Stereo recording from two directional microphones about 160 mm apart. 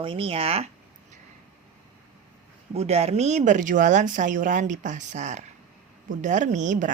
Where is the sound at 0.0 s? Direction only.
35° right (ahead or behind).